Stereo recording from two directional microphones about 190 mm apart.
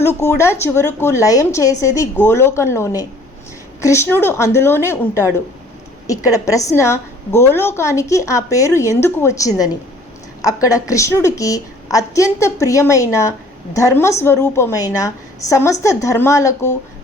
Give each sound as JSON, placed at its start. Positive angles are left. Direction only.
{"t": 0.0, "sound": "a woman's voice", "side_deg": 10}